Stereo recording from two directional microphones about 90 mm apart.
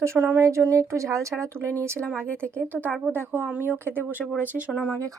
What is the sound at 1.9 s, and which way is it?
Speech, 10° left (ahead or behind).